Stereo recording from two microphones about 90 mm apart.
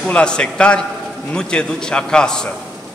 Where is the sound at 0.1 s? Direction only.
10° left (ahead or behind).